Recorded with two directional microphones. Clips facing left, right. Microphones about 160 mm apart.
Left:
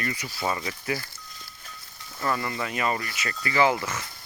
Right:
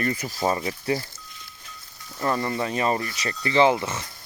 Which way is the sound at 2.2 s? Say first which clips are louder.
Right 3 dB; 30° right (ahead or behind).